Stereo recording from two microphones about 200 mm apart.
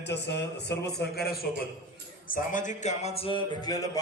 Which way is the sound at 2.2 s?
40° left (ahead or behind).